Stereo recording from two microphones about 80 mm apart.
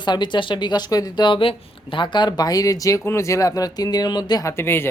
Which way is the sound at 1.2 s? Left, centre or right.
Left.